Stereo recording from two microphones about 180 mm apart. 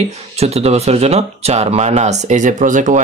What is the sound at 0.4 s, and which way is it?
Speech, 35° right (ahead or behind).